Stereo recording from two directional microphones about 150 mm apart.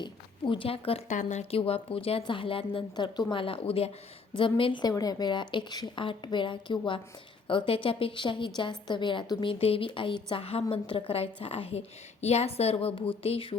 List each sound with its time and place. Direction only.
0.0 s a woman's voice: 35° left (ahead or behind)
1.0 s a woman's voice: 55° left (ahead or behind); by 13.6 s 40° left (ahead or behind)